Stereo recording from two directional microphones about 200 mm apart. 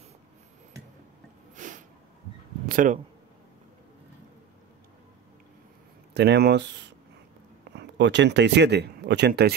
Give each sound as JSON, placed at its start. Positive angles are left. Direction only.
{"t": 1.5, "sound": "snort", "side_deg": -40}
{"t": 2.7, "sound": "speech", "side_deg": -40}
{"t": 6.1, "sound": "speech", "side_deg": -55}